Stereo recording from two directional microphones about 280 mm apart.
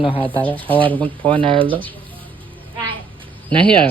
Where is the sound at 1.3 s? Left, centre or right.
Centre.